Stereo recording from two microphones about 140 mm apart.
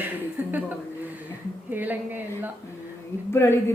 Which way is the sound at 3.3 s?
20° left (ahead or behind).